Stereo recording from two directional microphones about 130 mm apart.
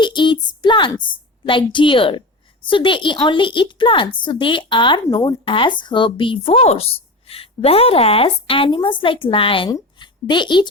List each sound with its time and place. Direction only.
0.0 s a woman's voice: 35° left (ahead or behind)